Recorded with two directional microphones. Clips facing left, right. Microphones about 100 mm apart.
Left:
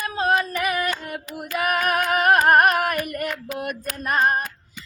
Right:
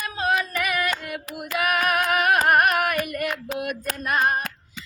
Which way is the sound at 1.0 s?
40° left (ahead or behind).